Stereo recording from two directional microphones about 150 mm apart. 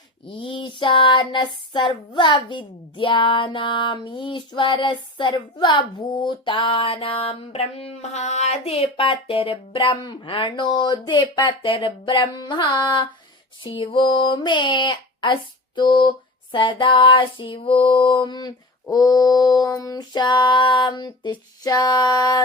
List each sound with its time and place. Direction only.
0.3 s speech: 35° left (ahead or behind)